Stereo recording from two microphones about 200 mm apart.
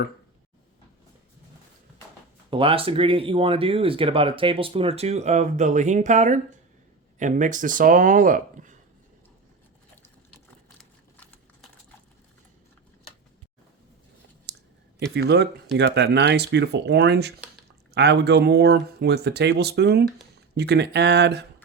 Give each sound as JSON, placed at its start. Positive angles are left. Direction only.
{"t": 2.5, "sound": "speech", "side_deg": -25}
{"t": 15.1, "sound": "speech", "side_deg": -55}